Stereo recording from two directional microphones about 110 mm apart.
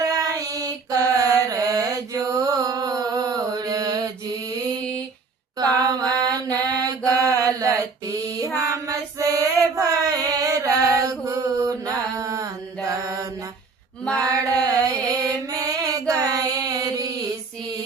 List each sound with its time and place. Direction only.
0.0 s mantra: 30° right (ahead or behind)
4.8 s a sound: 10° left (ahead or behind)
6.0 s mantra: 35° right (ahead or behind)
8.5 s female singing: 30° right (ahead or behind)
14.2 s music: 35° right (ahead or behind)